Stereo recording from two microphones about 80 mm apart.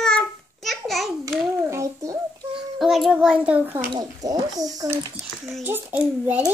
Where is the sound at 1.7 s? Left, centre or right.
Right.